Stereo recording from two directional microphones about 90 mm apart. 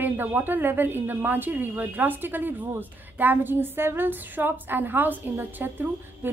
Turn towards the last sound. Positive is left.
turn(degrees=-20)  # may be behind; listen again after turning